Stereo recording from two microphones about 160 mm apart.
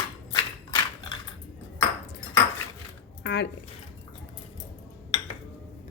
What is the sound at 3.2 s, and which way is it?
Speech, 90° left.